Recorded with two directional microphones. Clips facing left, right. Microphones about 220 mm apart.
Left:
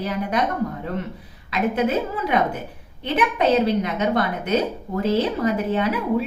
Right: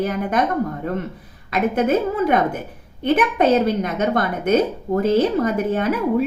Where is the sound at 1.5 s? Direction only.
50° right (ahead or behind).